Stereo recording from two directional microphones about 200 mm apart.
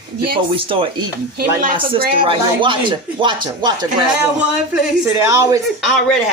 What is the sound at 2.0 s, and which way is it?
Speech, 50° right (ahead or behind).